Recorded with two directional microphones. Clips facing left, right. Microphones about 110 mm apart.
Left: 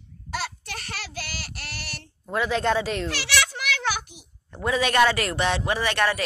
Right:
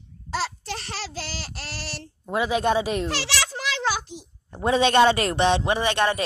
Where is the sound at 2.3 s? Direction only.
15° right (ahead or behind).